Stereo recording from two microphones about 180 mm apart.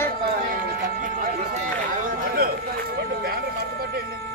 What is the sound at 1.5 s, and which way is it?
Run, 45° right (ahead or behind).